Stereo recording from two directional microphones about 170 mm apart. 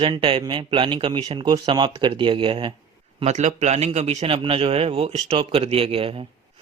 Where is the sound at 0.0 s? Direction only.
30° right (ahead or behind).